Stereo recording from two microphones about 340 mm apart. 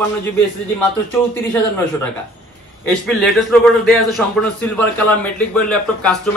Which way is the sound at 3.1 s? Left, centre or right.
Centre.